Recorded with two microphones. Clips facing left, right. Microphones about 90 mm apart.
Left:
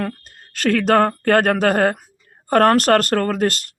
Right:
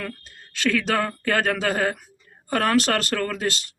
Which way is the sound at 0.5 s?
50° left (ahead or behind).